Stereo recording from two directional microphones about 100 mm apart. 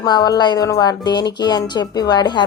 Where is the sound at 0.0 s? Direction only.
40° left (ahead or behind).